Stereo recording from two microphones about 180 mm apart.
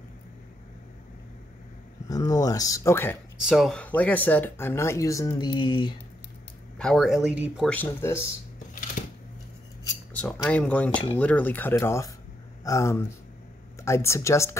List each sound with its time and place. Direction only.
2.0 s speech: 20° left (ahead or behind)
3.4 s speech: centre (ahead or behind); by 5.9 s 25° left (ahead or behind)
6.8 s speech: centre (ahead or behind)
7.7 s speech: 10° left (ahead or behind)
9.0 s a sound: 45° left (ahead or behind)
10.1 s speech: 10° left (ahead or behind)